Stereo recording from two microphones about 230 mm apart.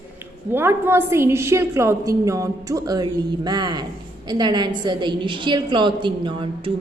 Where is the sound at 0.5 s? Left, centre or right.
Centre.